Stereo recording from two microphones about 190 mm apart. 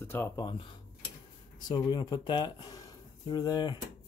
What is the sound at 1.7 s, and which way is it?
Speech, 20° left (ahead or behind).